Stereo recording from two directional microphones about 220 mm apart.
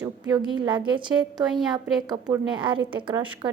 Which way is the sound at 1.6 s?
Centre (ahead or behind).